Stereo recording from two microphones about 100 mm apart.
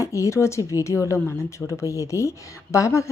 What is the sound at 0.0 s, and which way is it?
A woman's voice, 30° left (ahead or behind).